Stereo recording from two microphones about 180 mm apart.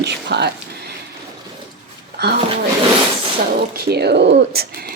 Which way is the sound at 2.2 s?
65° right (ahead or behind).